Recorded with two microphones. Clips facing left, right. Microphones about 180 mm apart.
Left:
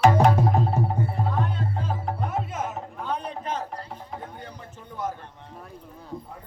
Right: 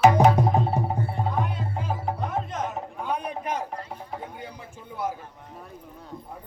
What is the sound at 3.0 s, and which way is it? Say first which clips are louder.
A man's voice: right 1 dB; 10° right (ahead or behind).